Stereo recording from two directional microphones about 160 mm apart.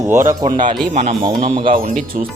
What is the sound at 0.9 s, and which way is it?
Speech, 45° right (ahead or behind).